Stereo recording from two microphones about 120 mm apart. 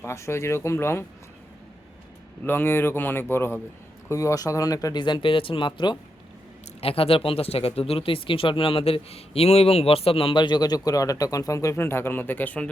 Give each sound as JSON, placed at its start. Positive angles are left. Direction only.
{"t": 0.0, "sound": "speech", "side_deg": 20}
{"t": 2.4, "sound": "speech", "side_deg": 15}
{"t": 6.8, "sound": "speech", "side_deg": 50}